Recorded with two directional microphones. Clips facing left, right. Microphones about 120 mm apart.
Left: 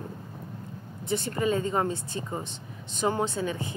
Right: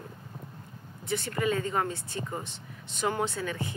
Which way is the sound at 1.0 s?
25° left (ahead or behind).